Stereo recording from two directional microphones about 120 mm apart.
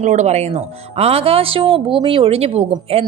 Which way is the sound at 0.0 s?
75° right (ahead or behind).